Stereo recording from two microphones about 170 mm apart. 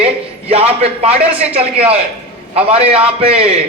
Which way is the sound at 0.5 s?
35° right (ahead or behind).